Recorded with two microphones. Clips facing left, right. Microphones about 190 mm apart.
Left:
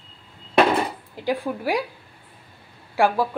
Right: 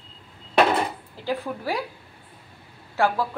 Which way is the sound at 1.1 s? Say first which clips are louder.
Left 3 dB; 15° left (ahead or behind).